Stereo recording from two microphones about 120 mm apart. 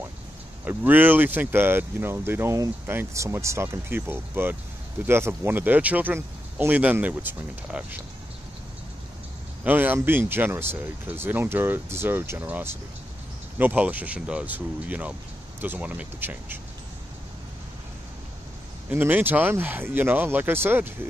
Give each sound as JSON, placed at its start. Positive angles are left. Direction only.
{"t": 0.7, "sound": "speech", "side_deg": -15}
{"t": 9.7, "sound": "speech", "side_deg": -15}
{"t": 18.9, "sound": "speech", "side_deg": -15}